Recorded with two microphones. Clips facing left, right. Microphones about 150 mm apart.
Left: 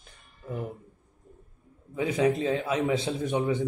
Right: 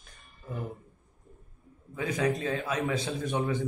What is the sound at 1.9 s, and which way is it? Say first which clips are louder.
Speech: left 4 dB; 20° left (ahead or behind).